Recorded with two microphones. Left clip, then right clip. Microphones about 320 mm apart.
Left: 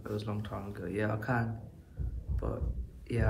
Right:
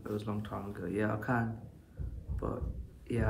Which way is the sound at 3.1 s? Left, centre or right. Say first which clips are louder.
Even; centre.